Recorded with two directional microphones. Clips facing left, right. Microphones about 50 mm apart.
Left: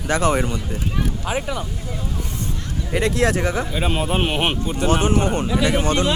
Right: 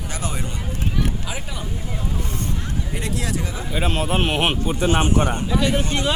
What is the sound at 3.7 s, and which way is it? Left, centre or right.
Speech, centre.